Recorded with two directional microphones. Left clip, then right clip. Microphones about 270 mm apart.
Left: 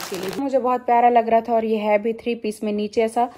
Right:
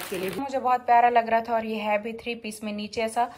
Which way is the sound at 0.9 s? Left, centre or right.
Right.